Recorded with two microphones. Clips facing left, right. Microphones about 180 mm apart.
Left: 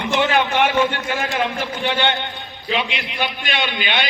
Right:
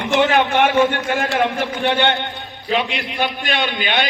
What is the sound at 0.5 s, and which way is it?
Speech, 55° right (ahead or behind).